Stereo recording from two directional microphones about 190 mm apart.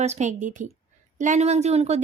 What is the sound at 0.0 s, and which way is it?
Speech, 35° right (ahead or behind).